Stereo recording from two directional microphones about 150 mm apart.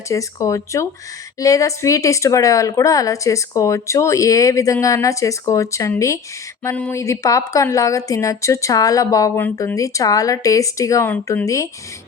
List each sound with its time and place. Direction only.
0.1 s speech: 20° left (ahead or behind)